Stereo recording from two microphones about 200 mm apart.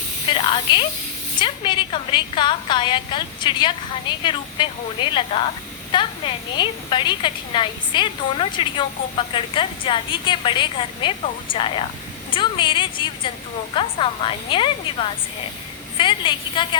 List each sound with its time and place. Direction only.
0.3 s hiss: 25° left (ahead or behind)
1.4 s a woman's voice: 25° left (ahead or behind)